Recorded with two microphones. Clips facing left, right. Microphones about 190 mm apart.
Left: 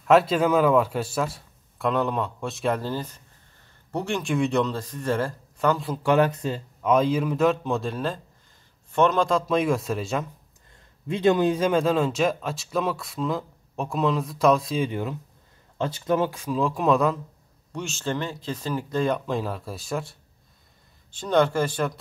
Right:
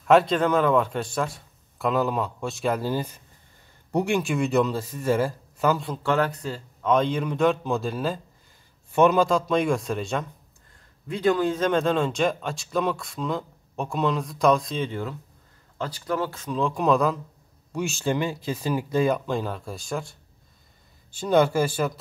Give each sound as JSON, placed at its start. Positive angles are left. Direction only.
{"t": 0.0, "sound": "speech", "side_deg": 0}
{"t": 6.0, "sound": "speech", "side_deg": 15}
{"t": 6.8, "sound": "speech", "side_deg": 5}
{"t": 11.1, "sound": "speech", "side_deg": 25}
{"t": 17.7, "sound": "speech", "side_deg": -10}
{"t": 21.1, "sound": "speech", "side_deg": -10}